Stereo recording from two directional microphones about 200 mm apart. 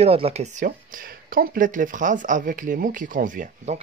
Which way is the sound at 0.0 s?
30° right (ahead or behind).